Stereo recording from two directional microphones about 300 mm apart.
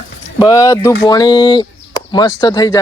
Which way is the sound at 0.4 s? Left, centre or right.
Centre.